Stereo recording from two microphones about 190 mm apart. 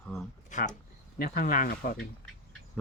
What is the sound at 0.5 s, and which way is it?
Speech, 40° left (ahead or behind).